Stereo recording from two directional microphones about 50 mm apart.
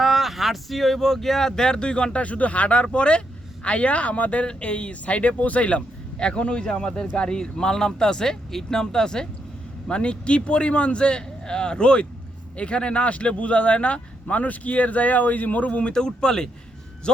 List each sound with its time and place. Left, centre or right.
0.0 s speech: centre; by 15.9 s left
15.9 s speech: centre